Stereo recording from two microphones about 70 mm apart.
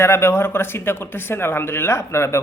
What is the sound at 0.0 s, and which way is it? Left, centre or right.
Speech, left.